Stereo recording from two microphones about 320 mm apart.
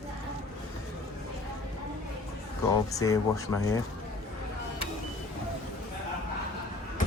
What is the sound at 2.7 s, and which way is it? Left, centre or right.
Speech, centre.